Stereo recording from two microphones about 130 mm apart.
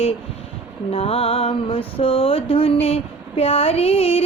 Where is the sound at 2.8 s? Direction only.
45° left (ahead or behind).